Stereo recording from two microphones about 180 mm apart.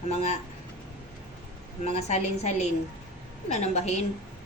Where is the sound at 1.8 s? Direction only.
40° left (ahead or behind).